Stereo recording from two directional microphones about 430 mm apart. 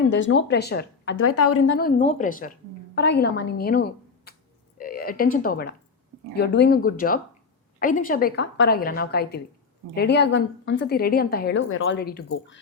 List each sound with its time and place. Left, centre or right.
0.1 s a woman's voice: left